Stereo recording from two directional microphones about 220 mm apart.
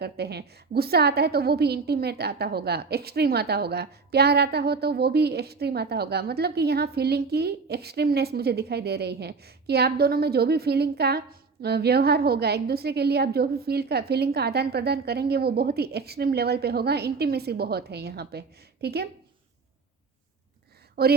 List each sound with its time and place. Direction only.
0.0 s a woman's voice: 45° right (ahead or behind)
20.9 s a woman's voice: 45° right (ahead or behind)